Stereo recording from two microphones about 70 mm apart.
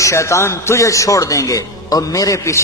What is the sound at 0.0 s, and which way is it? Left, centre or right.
Speech, left.